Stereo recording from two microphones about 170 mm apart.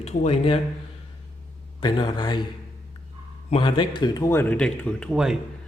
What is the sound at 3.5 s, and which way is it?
Speech, 30° left (ahead or behind).